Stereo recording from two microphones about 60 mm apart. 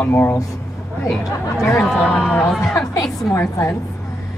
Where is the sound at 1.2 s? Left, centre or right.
Left.